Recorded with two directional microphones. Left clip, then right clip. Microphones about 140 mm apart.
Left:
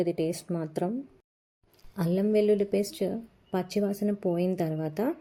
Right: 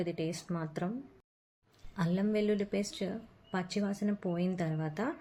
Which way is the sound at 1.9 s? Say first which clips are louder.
Left 7 dB; 40° left (ahead or behind).